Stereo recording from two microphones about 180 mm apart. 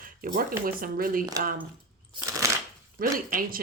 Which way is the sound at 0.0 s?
50° right (ahead or behind).